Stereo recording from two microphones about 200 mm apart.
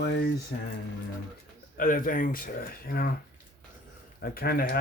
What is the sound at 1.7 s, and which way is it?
Speech, 45° left (ahead or behind).